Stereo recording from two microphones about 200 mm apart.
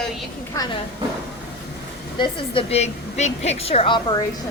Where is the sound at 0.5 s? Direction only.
15° left (ahead or behind).